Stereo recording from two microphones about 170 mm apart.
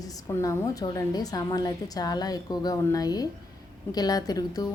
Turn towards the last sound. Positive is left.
turn(degrees=20)  # may be behind; listen again after turning